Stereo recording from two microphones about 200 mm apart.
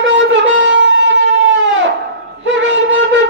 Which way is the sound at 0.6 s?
65° right (ahead or behind).